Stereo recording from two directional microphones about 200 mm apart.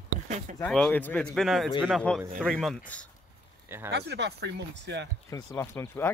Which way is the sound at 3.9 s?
55° right (ahead or behind).